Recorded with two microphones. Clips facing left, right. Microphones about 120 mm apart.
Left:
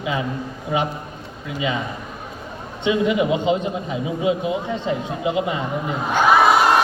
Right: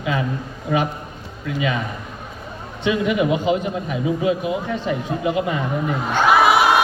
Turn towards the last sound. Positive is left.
turn(degrees=-10)  # may be behind; listen again after turning